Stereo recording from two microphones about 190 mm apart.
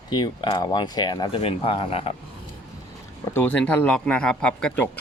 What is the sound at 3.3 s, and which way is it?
Speech, 10° left (ahead or behind).